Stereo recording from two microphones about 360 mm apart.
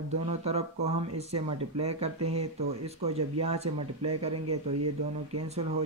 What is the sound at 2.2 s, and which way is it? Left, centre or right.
Speech, right.